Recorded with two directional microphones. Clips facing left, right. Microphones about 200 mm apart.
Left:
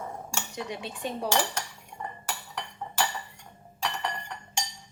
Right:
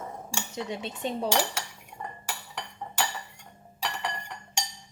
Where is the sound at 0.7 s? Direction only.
25° right (ahead or behind).